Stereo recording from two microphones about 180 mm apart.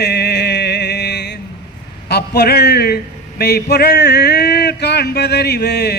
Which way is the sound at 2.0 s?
65° left (ahead or behind).